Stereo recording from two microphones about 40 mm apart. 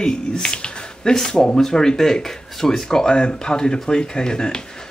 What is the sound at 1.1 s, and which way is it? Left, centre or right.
Speech, centre.